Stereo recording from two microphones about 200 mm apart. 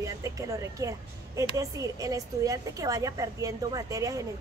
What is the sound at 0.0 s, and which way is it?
A woman's voice, 15° right (ahead or behind).